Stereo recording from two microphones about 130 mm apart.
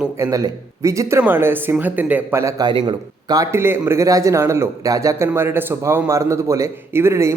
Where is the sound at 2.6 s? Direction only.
35° right (ahead or behind).